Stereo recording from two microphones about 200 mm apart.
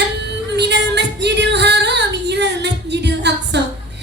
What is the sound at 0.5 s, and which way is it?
Female singing, 60° right (ahead or behind).